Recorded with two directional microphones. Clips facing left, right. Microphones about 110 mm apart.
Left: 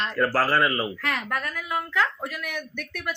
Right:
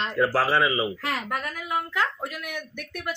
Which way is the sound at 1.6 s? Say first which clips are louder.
Left 1 dB; 5° right (ahead or behind).